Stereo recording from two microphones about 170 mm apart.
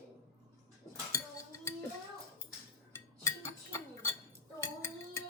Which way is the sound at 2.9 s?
15° left (ahead or behind).